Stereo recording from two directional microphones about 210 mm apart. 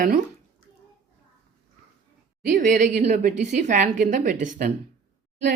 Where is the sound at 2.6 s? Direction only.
35° right (ahead or behind).